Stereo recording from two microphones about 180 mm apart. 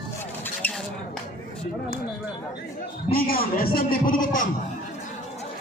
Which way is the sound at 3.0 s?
55° left (ahead or behind).